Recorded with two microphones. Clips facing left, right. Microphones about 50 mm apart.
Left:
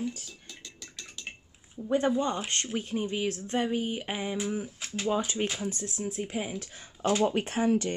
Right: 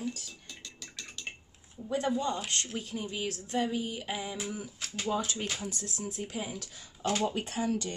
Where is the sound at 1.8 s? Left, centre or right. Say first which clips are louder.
Left 4 dB; left.